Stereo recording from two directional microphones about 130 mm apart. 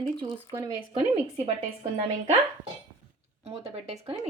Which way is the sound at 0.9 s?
45° right (ahead or behind).